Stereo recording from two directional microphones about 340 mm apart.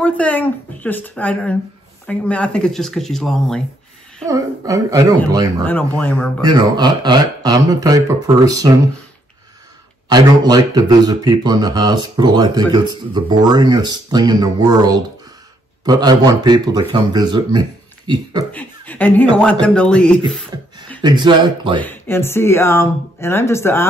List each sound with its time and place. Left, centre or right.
0.0 s speech: centre
4.3 s speech: centre
5.6 s speech: centre
6.4 s speech: centre
10.0 s speech: centre
18.5 s speech: centre
21.0 s speech: centre
21.8 s speech: centre